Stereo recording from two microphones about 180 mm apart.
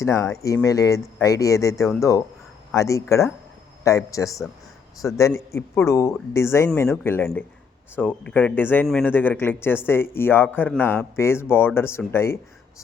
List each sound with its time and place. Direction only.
0.0 s a man's voice: 15° left (ahead or behind)